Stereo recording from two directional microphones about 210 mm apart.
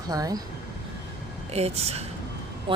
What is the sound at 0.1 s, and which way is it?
Speech, 15° right (ahead or behind).